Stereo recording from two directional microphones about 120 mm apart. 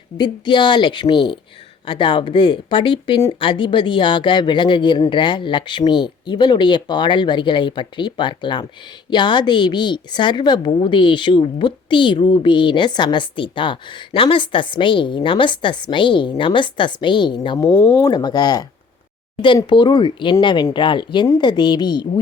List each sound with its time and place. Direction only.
0.2 s a woman's voice: 40° left (ahead or behind)
17.8 s speech: 20° left (ahead or behind)
18.1 s a woman's voice: 35° left (ahead or behind)
19.7 s a woman's voice: 40° left (ahead or behind)